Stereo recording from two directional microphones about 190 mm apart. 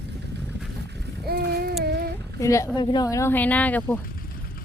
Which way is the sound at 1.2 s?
55° right (ahead or behind).